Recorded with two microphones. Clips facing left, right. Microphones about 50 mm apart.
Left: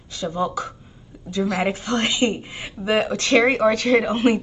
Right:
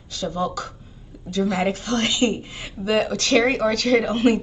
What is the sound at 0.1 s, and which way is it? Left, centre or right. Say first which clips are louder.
A woman's voice: left 1 dB; left.